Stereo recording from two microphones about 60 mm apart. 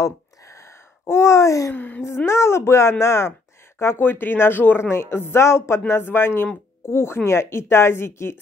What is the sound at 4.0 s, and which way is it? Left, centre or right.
Speech, left.